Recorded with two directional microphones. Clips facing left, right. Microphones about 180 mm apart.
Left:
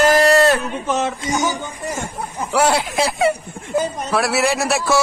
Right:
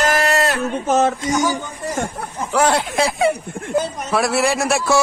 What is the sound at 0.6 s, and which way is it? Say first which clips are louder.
Speech: right 4 dB; 45° right (ahead or behind).